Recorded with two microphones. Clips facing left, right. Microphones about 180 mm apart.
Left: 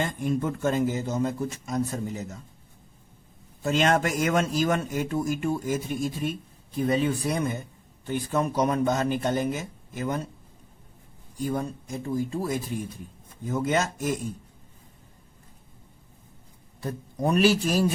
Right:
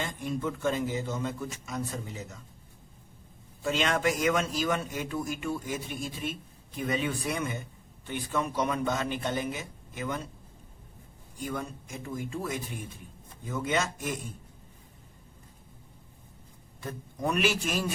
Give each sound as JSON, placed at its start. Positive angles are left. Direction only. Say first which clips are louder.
{"t": 0.0, "sound": "a man's voice", "louder": "left 5 dB", "side_deg": 50}
{"t": 3.6, "sound": "a man's voice", "louder": "left 5 dB", "side_deg": 45}
{"t": 11.4, "sound": "speech", "louder": "left 6 dB", "side_deg": 35}
{"t": 16.8, "sound": "speech", "louder": "left 5 dB", "side_deg": 35}